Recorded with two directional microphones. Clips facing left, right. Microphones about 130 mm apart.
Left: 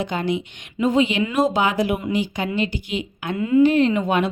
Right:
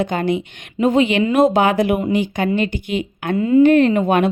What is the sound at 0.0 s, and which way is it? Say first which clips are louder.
A woman's voice: right 4 dB; 55° right (ahead or behind).